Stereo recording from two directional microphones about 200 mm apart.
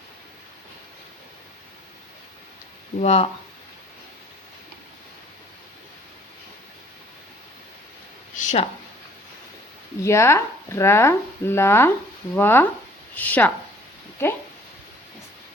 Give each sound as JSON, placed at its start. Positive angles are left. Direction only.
{"t": 3.0, "sound": "speech", "side_deg": 30}
{"t": 8.4, "sound": "a sound", "side_deg": 35}
{"t": 10.0, "sound": "speech", "side_deg": 15}